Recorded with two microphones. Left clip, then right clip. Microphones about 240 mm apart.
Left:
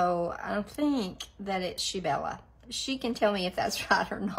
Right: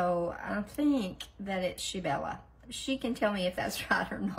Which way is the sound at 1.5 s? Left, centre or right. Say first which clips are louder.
Left 2 dB; centre.